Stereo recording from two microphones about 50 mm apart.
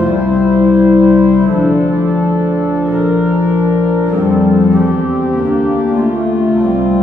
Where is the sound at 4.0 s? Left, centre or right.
Right.